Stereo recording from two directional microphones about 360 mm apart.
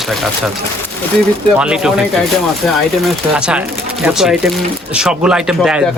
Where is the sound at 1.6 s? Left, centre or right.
Centre.